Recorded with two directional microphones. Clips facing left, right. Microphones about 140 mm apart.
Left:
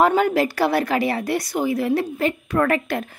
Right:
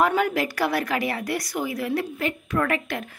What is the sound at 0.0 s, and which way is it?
A woman's voice, 30° left (ahead or behind).